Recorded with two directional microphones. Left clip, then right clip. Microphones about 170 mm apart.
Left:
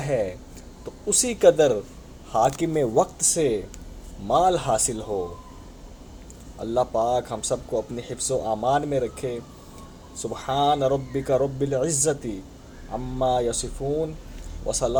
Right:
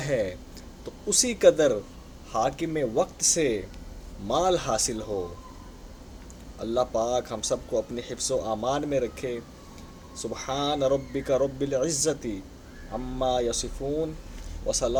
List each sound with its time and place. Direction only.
0.0 s speech: centre (ahead or behind)
1.2 s a man's voice: 10° left (ahead or behind); by 3.2 s 30° left (ahead or behind)
3.2 s a man's voice: 10° left (ahead or behind)
6.6 s a man's voice: 10° left (ahead or behind)